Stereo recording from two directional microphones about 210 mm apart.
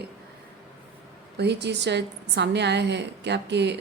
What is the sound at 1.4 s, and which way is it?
A woman's voice, 55° right (ahead or behind).